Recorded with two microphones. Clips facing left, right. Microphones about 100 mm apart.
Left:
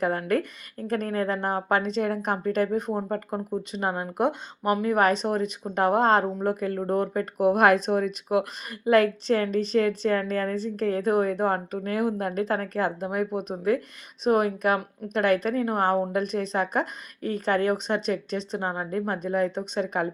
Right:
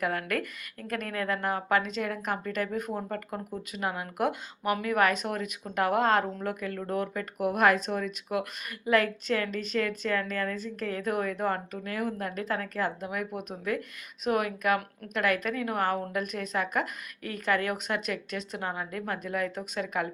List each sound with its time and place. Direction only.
0.0 s a woman's voice: 30° left (ahead or behind)